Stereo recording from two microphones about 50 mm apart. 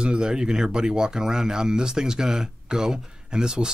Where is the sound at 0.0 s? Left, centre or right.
Centre.